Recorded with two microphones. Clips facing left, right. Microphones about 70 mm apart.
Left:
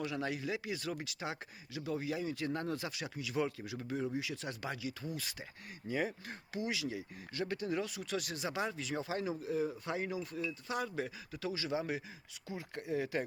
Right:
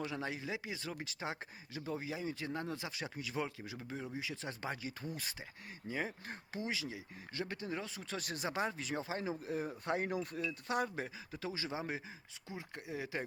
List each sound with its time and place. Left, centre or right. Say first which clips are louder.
0.0 s speech: left 3 dB; right
3.0 s speech: left 1 dB; right
3.3 s speech: left 6 dB; centre; by 5.3 s right
5.9 s speech: left 4 dB; right
6.2 s speech: left 2 dB; right
6.8 s speech: left 5 dB; right
9.4 s speech: left 4 dB; right
10.8 s speech: left 2 dB; right